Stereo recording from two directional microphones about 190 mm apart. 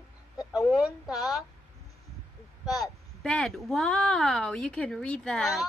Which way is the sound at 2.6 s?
Centre (ahead or behind).